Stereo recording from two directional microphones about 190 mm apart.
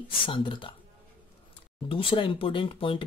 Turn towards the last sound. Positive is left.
turn(degrees=25)  # may be behind; listen again after turning